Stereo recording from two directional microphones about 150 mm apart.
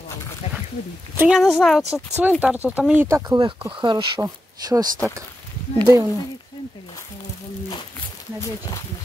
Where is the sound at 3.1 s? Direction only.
25° right (ahead or behind).